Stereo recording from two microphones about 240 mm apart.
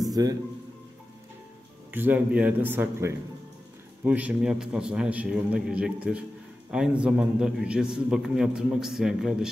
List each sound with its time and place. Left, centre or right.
0.1 s speech: centre
1.9 s a man's voice: centre